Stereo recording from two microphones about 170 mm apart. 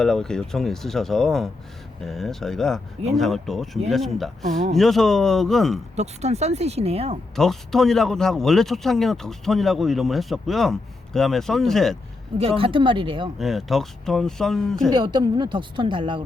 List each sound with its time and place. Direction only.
0.0 s speech: 5° left (ahead or behind)
6.0 s speech: 40° right (ahead or behind)
7.3 s speech: centre (ahead or behind)
12.4 s speech: 35° right (ahead or behind)
13.4 s speech: centre (ahead or behind)
14.9 s a woman's voice: 25° right (ahead or behind)